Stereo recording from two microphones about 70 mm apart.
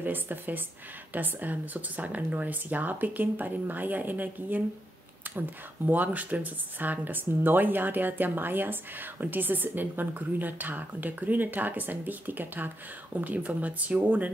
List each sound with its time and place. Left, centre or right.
0.0 s speech: right
5.9 s speech: right